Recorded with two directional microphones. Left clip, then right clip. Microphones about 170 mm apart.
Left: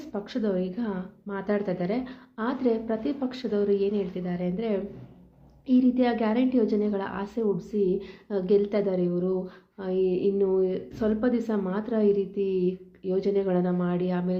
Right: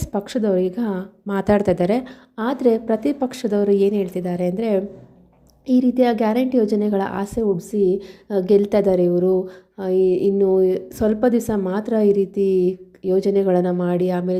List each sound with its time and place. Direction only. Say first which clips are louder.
0.1 s a woman's voice: right 9 dB; 40° right (ahead or behind)